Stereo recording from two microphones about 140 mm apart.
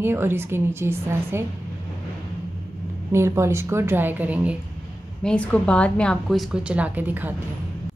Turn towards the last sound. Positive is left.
turn(degrees=-15)  # may be behind; listen again after turning